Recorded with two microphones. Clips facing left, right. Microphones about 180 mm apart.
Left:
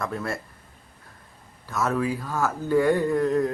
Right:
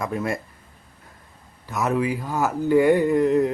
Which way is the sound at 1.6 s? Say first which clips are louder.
Right 2 dB; 15° right (ahead or behind).